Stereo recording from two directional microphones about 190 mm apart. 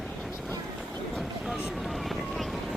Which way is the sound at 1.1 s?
5° left (ahead or behind).